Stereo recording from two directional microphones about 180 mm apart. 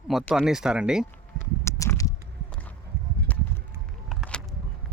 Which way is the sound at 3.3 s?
10° left (ahead or behind).